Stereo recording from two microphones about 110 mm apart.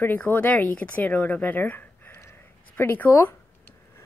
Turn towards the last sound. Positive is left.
turn(degrees=15)  # may be behind; listen again after turning